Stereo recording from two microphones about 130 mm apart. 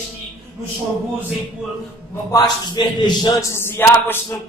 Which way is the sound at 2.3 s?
30° left (ahead or behind).